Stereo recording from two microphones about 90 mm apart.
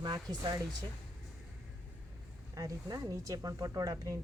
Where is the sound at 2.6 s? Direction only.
40° right (ahead or behind).